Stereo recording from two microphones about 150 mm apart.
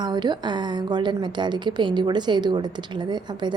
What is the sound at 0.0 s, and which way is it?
A woman's voice, 30° right (ahead or behind).